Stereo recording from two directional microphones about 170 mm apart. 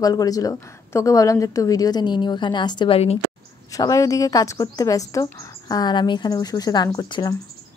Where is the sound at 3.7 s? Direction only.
20° left (ahead or behind).